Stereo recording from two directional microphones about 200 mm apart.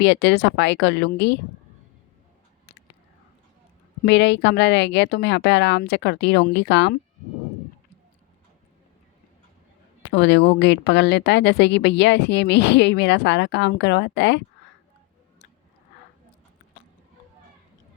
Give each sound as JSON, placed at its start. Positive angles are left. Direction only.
{"t": 0.0, "sound": "speech", "side_deg": 60}
{"t": 4.0, "sound": "speech", "side_deg": 60}
{"t": 10.0, "sound": "speech", "side_deg": 60}